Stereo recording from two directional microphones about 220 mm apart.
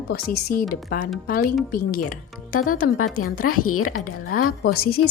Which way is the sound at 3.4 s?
85° left.